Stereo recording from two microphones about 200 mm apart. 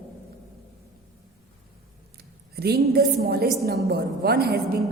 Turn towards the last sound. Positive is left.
turn(degrees=-50)  # may be behind; listen again after turning